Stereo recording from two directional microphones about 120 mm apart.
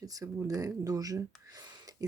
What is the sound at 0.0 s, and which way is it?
Speech, 30° right (ahead or behind).